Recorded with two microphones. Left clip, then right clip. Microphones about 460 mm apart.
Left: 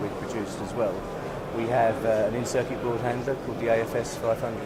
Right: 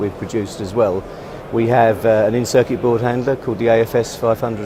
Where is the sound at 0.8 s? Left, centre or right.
Right.